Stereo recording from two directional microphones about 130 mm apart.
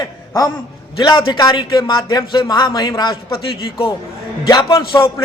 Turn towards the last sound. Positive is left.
turn(degrees=35)  # may be behind; listen again after turning